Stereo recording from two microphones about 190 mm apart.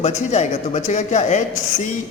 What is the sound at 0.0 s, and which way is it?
A man's voice, 35° left (ahead or behind).